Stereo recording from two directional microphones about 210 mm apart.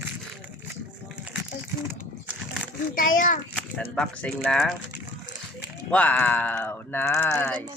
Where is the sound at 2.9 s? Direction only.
40° left (ahead or behind).